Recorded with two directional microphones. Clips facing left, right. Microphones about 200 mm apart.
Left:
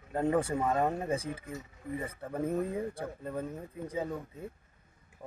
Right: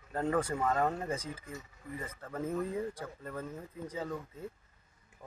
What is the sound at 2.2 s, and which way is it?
Speech, 15° left (ahead or behind).